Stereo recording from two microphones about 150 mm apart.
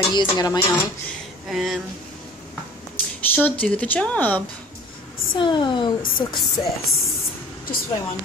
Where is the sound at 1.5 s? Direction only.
Centre (ahead or behind).